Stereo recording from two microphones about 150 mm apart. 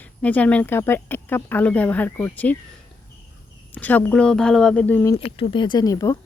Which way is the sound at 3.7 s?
10° left (ahead or behind).